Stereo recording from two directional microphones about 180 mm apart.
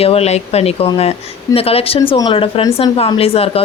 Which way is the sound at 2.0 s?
20° left (ahead or behind).